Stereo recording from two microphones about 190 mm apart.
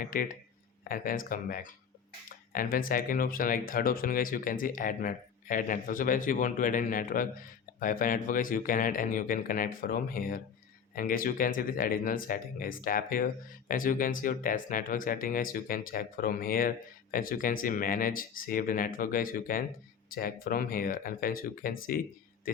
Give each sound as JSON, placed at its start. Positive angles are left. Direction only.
{"t": 0.0, "sound": "speech", "side_deg": 50}